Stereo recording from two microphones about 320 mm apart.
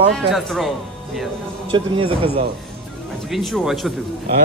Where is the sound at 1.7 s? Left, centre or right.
Centre.